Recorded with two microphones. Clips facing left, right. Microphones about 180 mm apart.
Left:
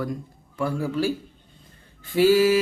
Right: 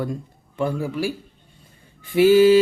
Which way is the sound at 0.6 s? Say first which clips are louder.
Right 1 dB; 20° right (ahead or behind).